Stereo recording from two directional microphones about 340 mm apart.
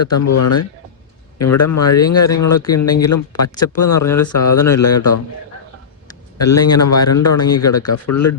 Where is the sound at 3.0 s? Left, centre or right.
Left.